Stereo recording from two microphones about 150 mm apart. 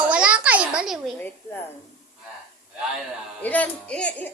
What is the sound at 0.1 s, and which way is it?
Babbling, 10° right (ahead or behind).